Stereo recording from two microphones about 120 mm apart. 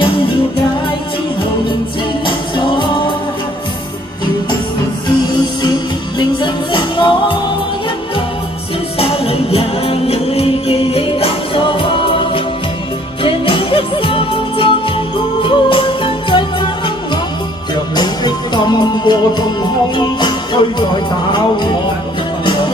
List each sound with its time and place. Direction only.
0.0 s music: 45° left (ahead or behind)
2.2 s music: 40° left (ahead or behind)
5.6 s music: 40° left (ahead or behind)
8.9 s music: 55° left (ahead or behind)